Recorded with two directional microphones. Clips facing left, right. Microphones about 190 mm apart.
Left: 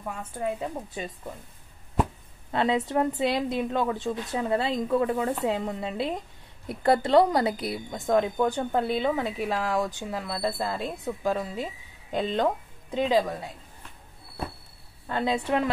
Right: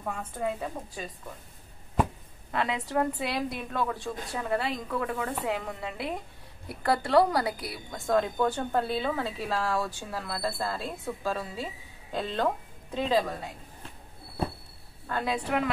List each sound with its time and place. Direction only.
0.0 s a woman's voice: 10° left (ahead or behind)
2.5 s a woman's voice: 25° left (ahead or behind)
15.0 s a woman's voice: 25° left (ahead or behind)